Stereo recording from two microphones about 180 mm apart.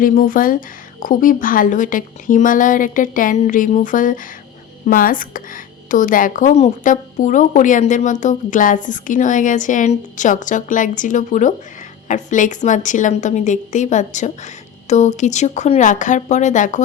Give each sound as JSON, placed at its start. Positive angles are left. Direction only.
{"t": 0.0, "sound": "a woman's voice", "side_deg": 50}